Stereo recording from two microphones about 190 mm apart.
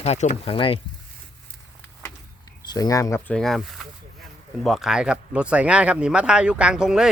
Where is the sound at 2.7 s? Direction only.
20° left (ahead or behind).